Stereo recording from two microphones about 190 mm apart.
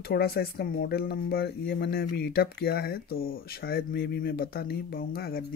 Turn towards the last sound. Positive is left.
turn(degrees=55)  # may be behind; listen again after turning